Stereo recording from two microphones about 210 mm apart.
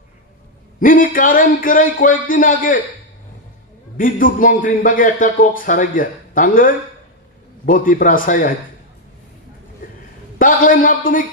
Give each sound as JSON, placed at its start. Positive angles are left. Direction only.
{"t": 0.7, "sound": "a man's voice", "side_deg": 40}
{"t": 3.9, "sound": "a man's voice", "side_deg": 40}
{"t": 10.4, "sound": "a man's voice", "side_deg": 40}